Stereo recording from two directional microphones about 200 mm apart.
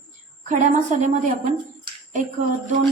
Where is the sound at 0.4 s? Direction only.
35° right (ahead or behind).